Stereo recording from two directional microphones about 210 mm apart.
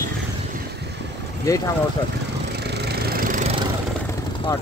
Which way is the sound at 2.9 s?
50° right (ahead or behind).